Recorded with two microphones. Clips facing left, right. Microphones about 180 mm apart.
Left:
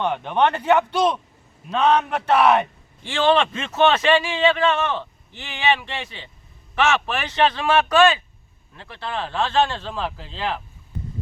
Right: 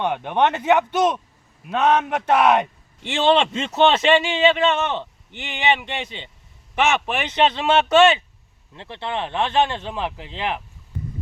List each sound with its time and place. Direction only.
0.0 s speech: 15° right (ahead or behind)
3.1 s a man's voice: 25° right (ahead or behind)